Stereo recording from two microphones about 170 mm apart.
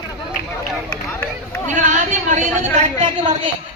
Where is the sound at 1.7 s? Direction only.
45° right (ahead or behind).